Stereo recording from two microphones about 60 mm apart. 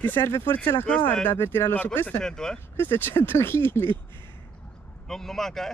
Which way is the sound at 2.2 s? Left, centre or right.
Centre.